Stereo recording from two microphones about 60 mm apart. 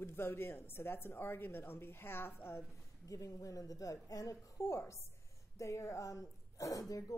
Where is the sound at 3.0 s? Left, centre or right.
Left.